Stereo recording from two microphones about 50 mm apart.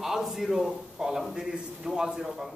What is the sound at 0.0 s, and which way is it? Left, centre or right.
A man's voice, centre.